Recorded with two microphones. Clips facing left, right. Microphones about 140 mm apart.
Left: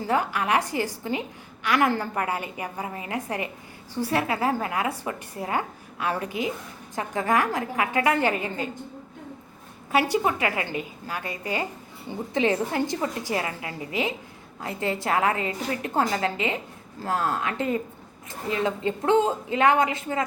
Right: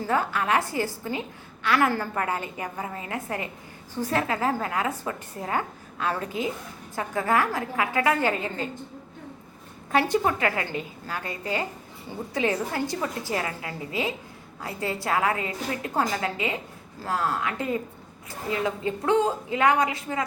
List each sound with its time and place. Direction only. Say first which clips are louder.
0.1 s a woman's voice: left 1 dB; 15° left (ahead or behind)
9.9 s a woman's voice: even; 10° left (ahead or behind)